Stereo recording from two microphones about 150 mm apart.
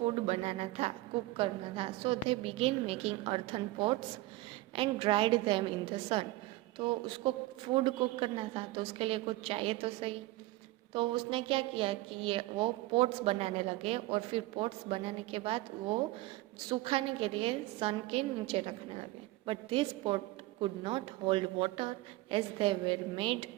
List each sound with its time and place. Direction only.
0.0 s a woman's voice: 45° right (ahead or behind)